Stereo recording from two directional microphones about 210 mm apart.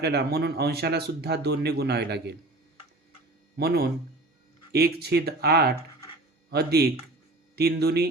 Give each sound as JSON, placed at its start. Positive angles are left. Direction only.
{"t": 0.0, "sound": "speech", "side_deg": -50}
{"t": 3.6, "sound": "speech", "side_deg": -50}